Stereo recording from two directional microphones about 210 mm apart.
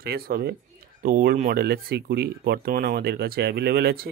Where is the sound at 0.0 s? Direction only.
45° right (ahead or behind).